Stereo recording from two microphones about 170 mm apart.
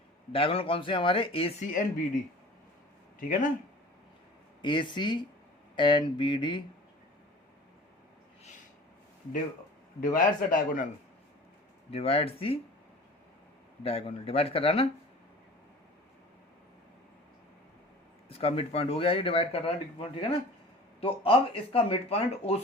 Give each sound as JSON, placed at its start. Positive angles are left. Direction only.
{"t": 0.3, "sound": "speech", "side_deg": 35}
{"t": 3.2, "sound": "a man's voice", "side_deg": 50}
{"t": 4.6, "sound": "speech", "side_deg": 30}
{"t": 10.0, "sound": "a man's voice", "side_deg": 55}
{"t": 11.9, "sound": "speech", "side_deg": 35}
{"t": 13.8, "sound": "speech", "side_deg": 35}
{"t": 18.3, "sound": "speech", "side_deg": 35}